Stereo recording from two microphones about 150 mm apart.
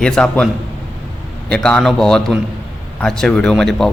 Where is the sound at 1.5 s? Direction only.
5° left (ahead or behind).